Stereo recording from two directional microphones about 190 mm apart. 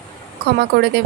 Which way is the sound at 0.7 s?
60° right (ahead or behind).